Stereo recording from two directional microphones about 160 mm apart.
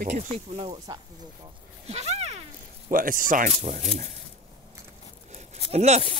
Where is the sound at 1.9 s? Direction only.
40° right (ahead or behind).